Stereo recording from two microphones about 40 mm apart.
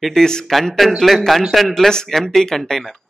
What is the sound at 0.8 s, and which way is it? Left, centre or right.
A man's voice, centre.